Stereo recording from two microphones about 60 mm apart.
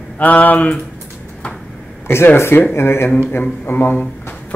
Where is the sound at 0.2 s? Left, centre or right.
Left.